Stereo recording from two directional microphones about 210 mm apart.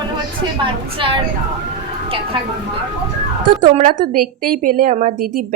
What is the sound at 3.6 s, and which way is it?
A woman's voice, 40° right (ahead or behind).